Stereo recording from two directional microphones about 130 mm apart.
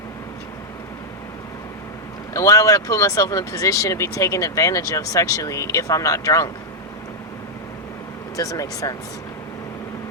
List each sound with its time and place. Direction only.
2.3 s speech: 25° left (ahead or behind)
8.4 s speech: 25° left (ahead or behind)